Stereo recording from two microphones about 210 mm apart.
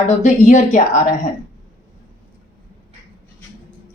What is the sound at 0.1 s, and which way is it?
Speech, 35° left (ahead or behind).